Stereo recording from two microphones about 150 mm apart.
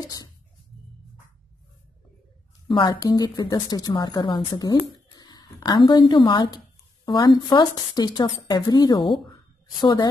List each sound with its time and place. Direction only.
0.0 s music: 25° left (ahead or behind)
2.7 s speech: 30° left (ahead or behind)